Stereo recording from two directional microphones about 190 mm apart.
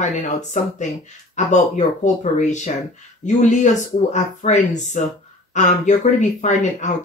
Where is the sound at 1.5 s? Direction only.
40° left (ahead or behind).